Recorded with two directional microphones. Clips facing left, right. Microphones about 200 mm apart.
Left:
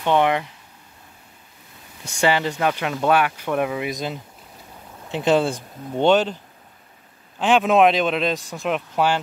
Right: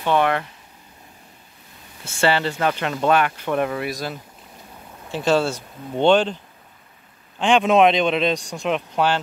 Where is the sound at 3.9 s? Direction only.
20° left (ahead or behind).